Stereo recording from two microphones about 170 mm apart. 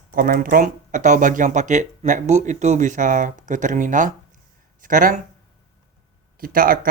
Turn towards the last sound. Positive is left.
turn(degrees=-55)  # may be behind; listen again after turning